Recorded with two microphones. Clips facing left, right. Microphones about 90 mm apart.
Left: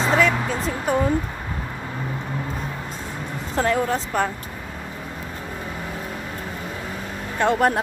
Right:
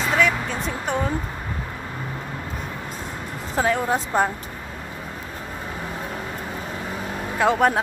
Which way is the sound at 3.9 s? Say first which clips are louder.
Right 2 dB; 20° right (ahead or behind).